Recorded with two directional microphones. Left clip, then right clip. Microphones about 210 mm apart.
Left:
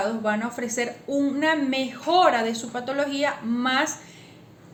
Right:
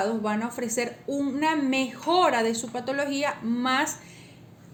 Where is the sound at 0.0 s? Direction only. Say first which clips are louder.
Left 2 dB; 40° right (ahead or behind).